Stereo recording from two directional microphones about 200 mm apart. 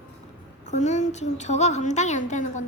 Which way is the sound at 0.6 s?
35° left (ahead or behind).